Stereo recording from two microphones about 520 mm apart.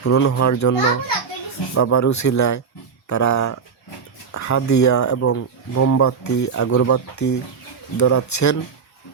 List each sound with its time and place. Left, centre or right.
0.0 s speech: left